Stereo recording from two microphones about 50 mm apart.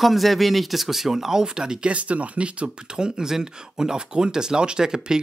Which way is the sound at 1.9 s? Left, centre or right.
Right.